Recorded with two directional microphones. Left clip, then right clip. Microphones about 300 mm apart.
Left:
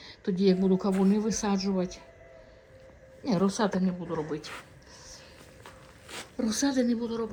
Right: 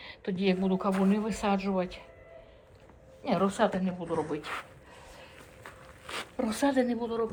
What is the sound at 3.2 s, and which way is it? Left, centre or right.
Speech, centre.